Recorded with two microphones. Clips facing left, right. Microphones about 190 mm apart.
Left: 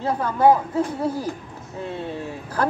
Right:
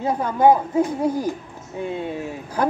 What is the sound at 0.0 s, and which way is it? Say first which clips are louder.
Speech: right 1 dB; 15° right (ahead or behind).